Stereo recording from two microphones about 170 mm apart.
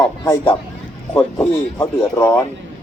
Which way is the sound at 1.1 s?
15° left (ahead or behind).